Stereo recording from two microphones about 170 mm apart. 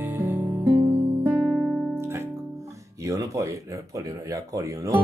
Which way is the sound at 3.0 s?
20° right (ahead or behind).